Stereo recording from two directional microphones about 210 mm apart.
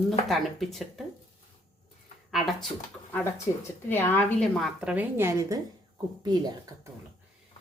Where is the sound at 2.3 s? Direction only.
Centre (ahead or behind).